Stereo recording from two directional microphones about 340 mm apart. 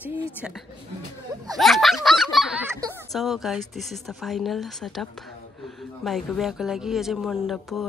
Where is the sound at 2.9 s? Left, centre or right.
Centre.